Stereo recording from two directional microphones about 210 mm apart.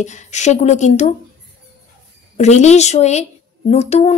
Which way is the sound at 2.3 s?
35° left (ahead or behind).